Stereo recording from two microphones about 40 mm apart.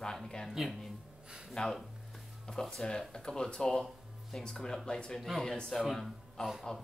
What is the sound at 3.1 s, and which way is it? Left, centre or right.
Speech, centre.